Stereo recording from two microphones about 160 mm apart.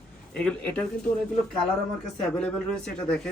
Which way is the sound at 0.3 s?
5° left (ahead or behind).